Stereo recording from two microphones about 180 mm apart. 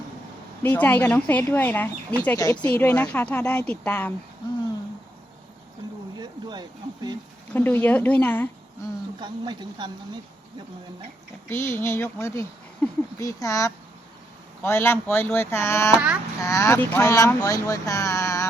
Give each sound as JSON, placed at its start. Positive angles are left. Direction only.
{"t": 0.6, "sound": "speech", "side_deg": 10}
{"t": 6.1, "sound": "speech", "side_deg": -20}
{"t": 7.5, "sound": "speech", "side_deg": 10}
{"t": 9.2, "sound": "speech", "side_deg": -25}
{"t": 11.4, "sound": "speech", "side_deg": 10}